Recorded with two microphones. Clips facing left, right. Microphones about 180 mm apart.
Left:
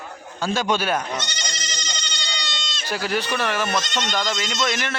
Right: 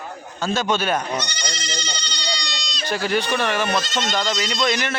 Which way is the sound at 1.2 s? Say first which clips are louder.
Right 3 dB; 25° left (ahead or behind).